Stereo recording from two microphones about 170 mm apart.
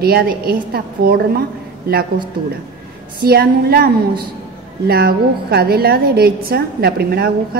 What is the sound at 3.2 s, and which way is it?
A woman's voice, 65° right (ahead or behind).